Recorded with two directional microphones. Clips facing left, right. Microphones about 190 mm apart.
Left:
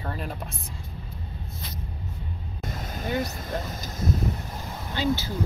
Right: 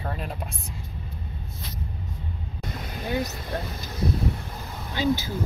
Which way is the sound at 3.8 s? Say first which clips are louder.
Right 2 dB; 45° left (ahead or behind).